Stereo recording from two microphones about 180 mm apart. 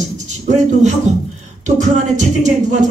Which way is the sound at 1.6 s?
40° right (ahead or behind).